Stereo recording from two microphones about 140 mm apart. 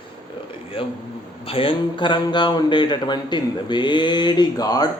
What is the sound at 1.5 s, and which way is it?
Mantra, 40° left (ahead or behind).